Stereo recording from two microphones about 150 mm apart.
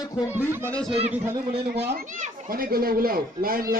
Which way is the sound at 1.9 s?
60° right (ahead or behind).